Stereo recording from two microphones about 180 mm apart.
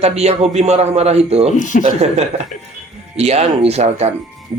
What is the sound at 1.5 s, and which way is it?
Speech, 45° left (ahead or behind).